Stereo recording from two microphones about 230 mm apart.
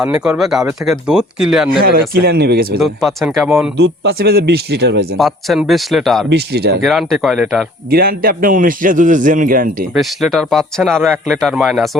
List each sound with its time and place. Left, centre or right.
0.0 s speech: centre
2.1 s speech: right
2.8 s speech: centre
3.8 s speech: right
5.1 s speech: centre
6.2 s speech: right
6.8 s speech: centre
7.9 s a man's voice: right
9.9 s speech: centre